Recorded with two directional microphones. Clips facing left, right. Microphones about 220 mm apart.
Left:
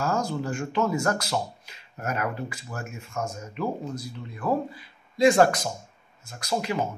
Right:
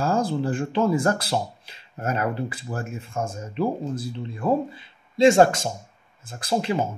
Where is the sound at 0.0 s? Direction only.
30° right (ahead or behind).